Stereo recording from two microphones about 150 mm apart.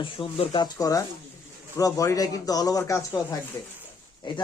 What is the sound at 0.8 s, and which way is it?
Speech, 25° left (ahead or behind).